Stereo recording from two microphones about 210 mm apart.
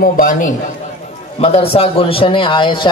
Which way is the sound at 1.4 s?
30° left (ahead or behind).